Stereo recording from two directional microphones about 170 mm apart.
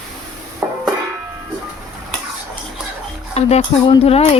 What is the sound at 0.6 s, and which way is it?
Music, 10° right (ahead or behind).